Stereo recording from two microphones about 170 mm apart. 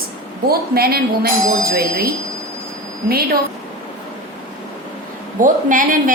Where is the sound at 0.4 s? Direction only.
65° right (ahead or behind).